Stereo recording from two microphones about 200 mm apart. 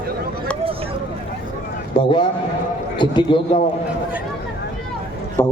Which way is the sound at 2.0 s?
25° left (ahead or behind).